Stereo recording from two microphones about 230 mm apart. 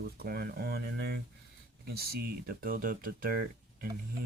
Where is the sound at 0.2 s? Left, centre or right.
Right.